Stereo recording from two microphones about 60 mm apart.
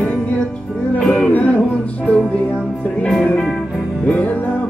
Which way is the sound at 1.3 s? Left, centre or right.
Left.